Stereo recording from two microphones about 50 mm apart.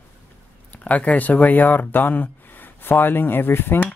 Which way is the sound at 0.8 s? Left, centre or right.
Left.